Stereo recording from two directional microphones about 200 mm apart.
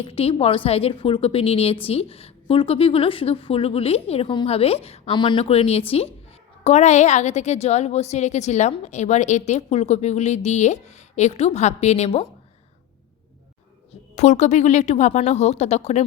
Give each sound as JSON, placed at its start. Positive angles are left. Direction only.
{"t": 0.0, "sound": "a woman's voice", "side_deg": 30}
{"t": 14.2, "sound": "a woman's voice", "side_deg": 35}